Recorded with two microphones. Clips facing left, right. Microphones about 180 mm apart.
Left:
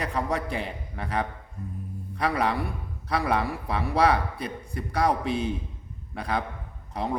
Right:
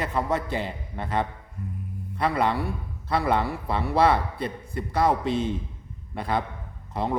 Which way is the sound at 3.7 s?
30° right (ahead or behind).